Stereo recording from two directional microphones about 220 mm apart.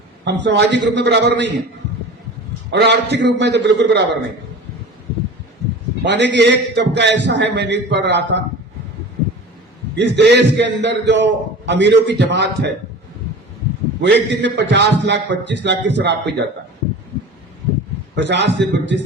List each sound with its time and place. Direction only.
0.3 s a man's voice: 50° right (ahead or behind)
2.7 s a man's voice: 50° right (ahead or behind)
6.1 s a man's voice: 55° right (ahead or behind)
9.9 s a man's voice: 50° right (ahead or behind)
14.0 s a man's voice: 50° right (ahead or behind)
18.1 s a man's voice: 50° right (ahead or behind)